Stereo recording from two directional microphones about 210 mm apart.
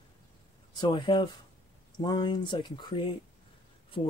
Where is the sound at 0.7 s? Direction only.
25° left (ahead or behind).